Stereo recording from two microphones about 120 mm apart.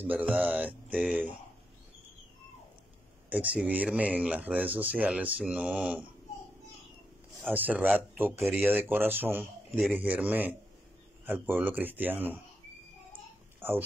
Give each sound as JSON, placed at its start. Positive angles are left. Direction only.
{"t": 0.0, "sound": "speech", "side_deg": -10}
{"t": 3.3, "sound": "speech", "side_deg": -15}
{"t": 7.5, "sound": "speech", "side_deg": -15}
{"t": 13.6, "sound": "speech", "side_deg": -15}